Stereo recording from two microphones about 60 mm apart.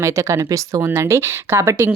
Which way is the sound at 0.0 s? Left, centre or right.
Right.